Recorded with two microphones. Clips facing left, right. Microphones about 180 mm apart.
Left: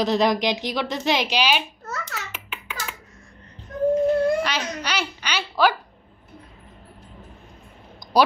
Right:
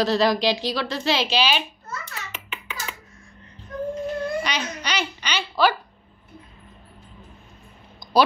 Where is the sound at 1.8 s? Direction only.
90° left.